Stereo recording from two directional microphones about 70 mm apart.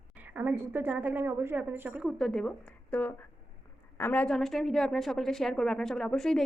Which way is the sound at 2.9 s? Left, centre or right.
Left.